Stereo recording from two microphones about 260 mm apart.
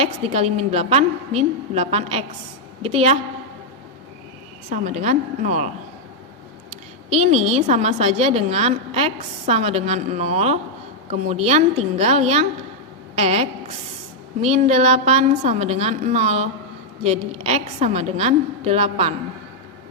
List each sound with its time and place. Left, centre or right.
0.0 s a woman's voice: right
4.7 s a woman's voice: right
7.1 s a woman's voice: right